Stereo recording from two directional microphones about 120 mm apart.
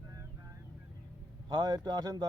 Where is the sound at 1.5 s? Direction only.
35° right (ahead or behind).